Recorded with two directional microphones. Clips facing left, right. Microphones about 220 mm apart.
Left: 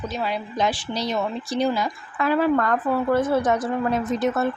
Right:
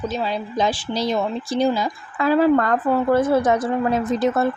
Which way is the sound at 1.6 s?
25° right (ahead or behind).